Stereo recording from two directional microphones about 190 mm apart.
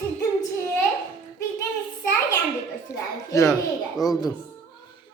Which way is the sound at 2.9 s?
15° left (ahead or behind).